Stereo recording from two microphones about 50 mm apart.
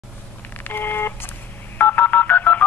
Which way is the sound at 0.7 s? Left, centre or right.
Left.